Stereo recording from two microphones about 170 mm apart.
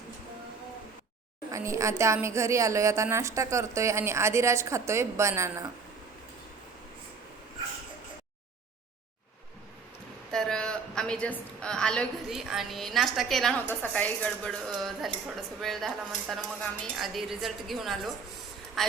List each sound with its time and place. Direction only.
1.5 s a woman's voice: 20° right (ahead or behind)
10.3 s a woman's voice: 5° left (ahead or behind)